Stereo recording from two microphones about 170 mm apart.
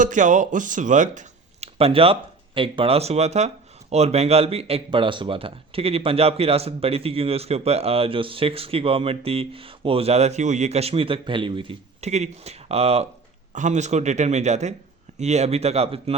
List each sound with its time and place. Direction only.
0.0 s a man's voice: 50° right (ahead or behind)